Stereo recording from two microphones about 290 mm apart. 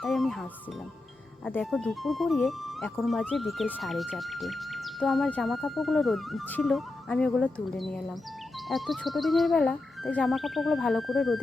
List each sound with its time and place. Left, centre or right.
0.0 s music: centre
1.5 s speech: centre